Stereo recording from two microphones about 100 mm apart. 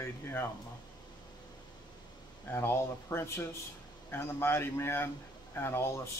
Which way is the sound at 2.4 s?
25° left (ahead or behind).